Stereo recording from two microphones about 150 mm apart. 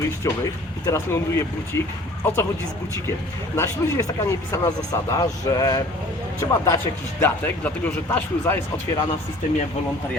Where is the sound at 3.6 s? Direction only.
20° left (ahead or behind).